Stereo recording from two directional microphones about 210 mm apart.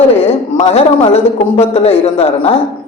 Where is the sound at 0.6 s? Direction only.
30° left (ahead or behind).